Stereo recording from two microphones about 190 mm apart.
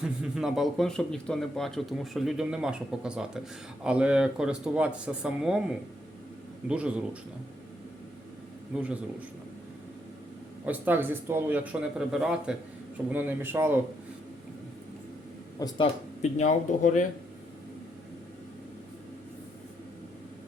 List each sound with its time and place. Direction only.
0.0 s a man's voice: centre (ahead or behind)
6.7 s a man's voice: 5° right (ahead or behind)
8.7 s a man's voice: 5° right (ahead or behind)
10.7 s a man's voice: 10° right (ahead or behind)
15.5 s speech: 20° left (ahead or behind)
16.2 s speech: 40° left (ahead or behind)